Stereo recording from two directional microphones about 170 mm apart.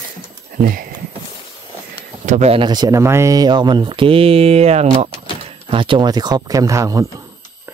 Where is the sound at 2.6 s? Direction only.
25° right (ahead or behind); by 5.1 s 45° right (ahead or behind).